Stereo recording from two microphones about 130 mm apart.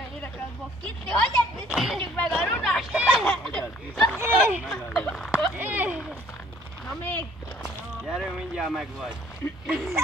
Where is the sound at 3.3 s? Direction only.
5° left (ahead or behind).